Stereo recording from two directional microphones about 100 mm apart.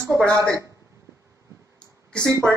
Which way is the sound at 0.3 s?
30° right (ahead or behind).